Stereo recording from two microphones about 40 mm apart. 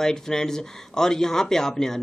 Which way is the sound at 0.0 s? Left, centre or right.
Centre.